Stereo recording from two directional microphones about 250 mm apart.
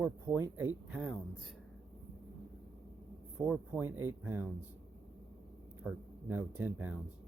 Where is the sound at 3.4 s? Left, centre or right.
Centre.